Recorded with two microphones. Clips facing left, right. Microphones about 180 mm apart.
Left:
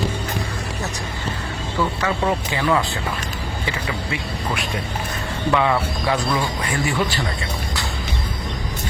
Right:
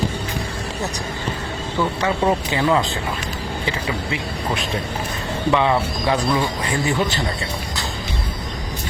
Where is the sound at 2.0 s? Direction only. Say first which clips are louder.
Right 2 dB; 25° right (ahead or behind).